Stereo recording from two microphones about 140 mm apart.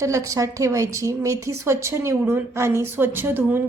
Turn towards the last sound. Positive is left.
turn(degrees=-15)  # may be behind; listen again after turning